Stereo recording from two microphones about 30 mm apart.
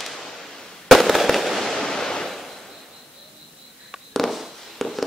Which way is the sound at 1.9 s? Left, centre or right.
Centre.